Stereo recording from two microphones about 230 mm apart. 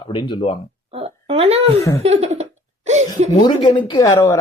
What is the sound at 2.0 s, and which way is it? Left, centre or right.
Laughter, right.